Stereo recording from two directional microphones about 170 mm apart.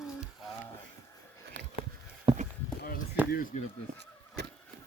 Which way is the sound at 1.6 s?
90° right.